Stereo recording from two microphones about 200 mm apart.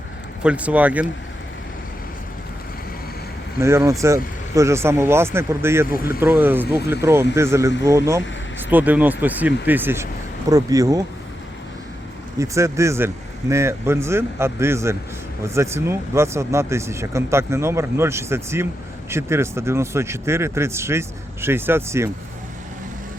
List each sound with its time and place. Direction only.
0.4 s speech: 5° right (ahead or behind)
3.6 s speech: 15° right (ahead or behind)
12.4 s speech: 15° right (ahead or behind)